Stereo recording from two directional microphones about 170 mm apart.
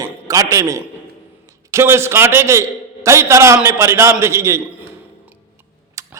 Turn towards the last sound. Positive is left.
turn(degrees=-15)  # may be behind; listen again after turning